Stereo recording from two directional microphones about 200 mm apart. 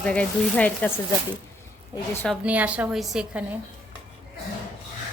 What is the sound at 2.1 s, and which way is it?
Speech, centre (ahead or behind).